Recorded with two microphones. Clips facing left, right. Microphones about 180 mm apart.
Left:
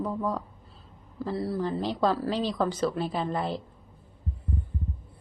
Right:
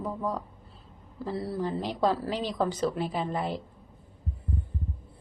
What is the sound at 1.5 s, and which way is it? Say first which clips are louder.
Speech: left 2 dB; 15° right (ahead or behind).